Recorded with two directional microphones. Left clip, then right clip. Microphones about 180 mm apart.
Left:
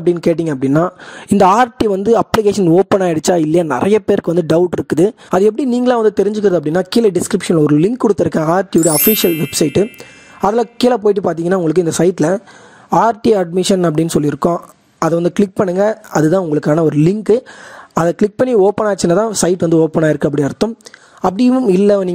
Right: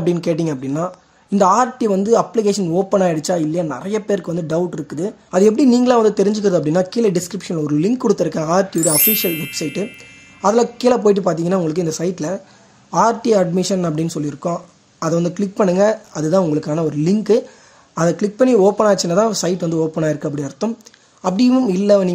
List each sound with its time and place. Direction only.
0.0 s speech: 45° left (ahead or behind)
1.4 s speech: 60° left (ahead or behind)